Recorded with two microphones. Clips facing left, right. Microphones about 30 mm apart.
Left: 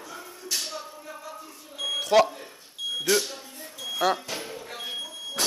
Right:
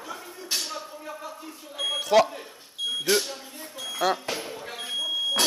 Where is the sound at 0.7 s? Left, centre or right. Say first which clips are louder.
Right 2 dB; centre.